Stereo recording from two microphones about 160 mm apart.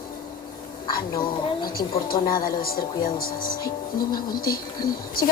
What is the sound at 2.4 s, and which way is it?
Speech, 65° left (ahead or behind).